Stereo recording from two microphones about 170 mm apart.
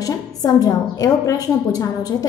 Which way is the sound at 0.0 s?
20° left (ahead or behind).